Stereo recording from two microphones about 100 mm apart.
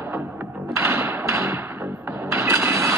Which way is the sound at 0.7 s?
25° right (ahead or behind).